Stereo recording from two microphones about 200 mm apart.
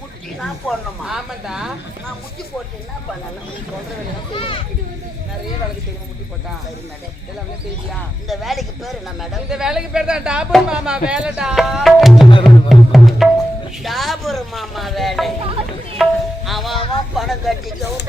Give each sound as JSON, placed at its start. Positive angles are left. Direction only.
{"t": 0.3, "sound": "a man's voice", "side_deg": 0}
{"t": 4.3, "sound": "a child's voice", "side_deg": 25}
{"t": 8.3, "sound": "a man's voice", "side_deg": 0}
{"t": 12.4, "sound": "music", "side_deg": 0}
{"t": 13.8, "sound": "a man's voice", "side_deg": 0}
{"t": 16.0, "sound": "music", "side_deg": 0}
{"t": 16.5, "sound": "a man's voice", "side_deg": 0}